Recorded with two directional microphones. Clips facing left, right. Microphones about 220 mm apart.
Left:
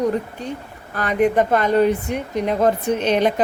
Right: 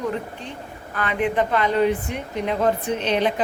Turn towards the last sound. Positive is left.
turn(degrees=45)  # may be behind; listen again after turning